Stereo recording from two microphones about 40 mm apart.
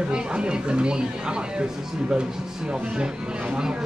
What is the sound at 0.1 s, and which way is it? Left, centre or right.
Speech, right.